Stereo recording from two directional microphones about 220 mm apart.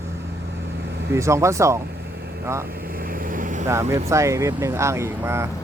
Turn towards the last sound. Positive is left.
turn(degrees=-10)  # may be behind; listen again after turning